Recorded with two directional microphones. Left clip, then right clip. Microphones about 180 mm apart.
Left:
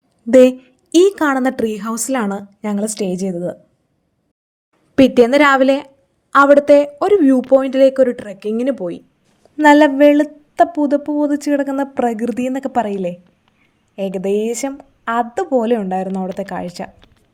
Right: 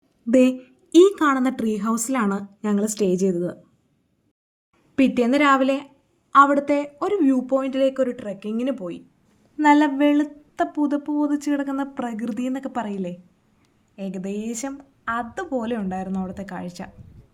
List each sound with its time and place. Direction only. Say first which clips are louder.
0.6 s speech: left 3 dB; 35° left (ahead or behind)
4.9 s speech: left 9 dB; 40° left (ahead or behind)